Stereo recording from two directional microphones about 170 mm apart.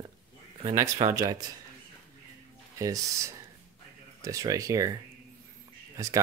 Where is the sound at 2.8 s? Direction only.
20° right (ahead or behind).